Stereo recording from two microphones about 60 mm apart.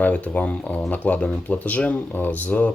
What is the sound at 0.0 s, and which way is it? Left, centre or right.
Speech, left.